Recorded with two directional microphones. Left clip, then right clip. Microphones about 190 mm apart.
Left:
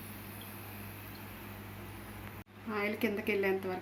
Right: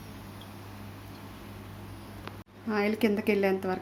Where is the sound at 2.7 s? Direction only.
55° right (ahead or behind).